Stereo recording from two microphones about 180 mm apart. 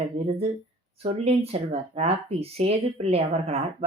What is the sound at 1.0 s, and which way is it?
Speech, 35° right (ahead or behind).